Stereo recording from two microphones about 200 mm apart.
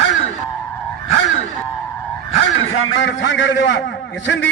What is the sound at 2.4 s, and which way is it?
A man's voice, 65° left (ahead or behind).